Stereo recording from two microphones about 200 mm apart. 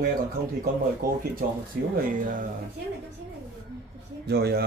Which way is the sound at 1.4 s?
45° right (ahead or behind).